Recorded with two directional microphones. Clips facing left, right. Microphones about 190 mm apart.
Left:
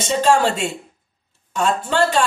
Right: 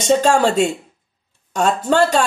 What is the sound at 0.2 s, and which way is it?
Speech, 45° right (ahead or behind).